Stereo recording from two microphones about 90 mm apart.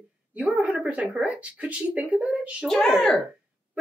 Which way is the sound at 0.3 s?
15° right (ahead or behind).